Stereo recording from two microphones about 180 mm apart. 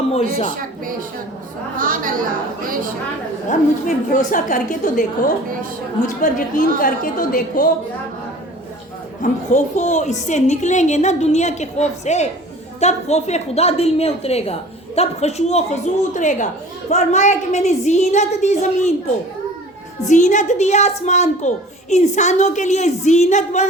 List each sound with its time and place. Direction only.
0.1 s a child's voice: 35° left (ahead or behind)
1.8 s a woman's voice: 50° right (ahead or behind)
3.5 s a woman's voice: 45° left (ahead or behind)
6.7 s a woman's voice: 50° left (ahead or behind)
9.2 s a child's voice: 45° left (ahead or behind)
20.1 s a child's voice: 45° left (ahead or behind)